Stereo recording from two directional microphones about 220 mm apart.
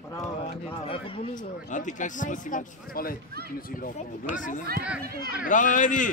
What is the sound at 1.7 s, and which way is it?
A man's voice, 35° left (ahead or behind).